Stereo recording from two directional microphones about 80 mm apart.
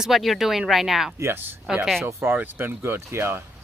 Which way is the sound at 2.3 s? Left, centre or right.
Right.